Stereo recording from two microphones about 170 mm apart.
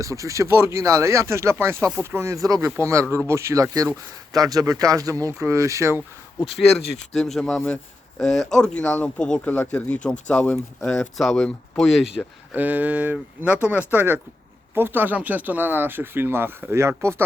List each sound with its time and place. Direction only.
0.0 s speech: 20° right (ahead or behind)
7.1 s speech: 5° left (ahead or behind); by 17.2 s 15° right (ahead or behind)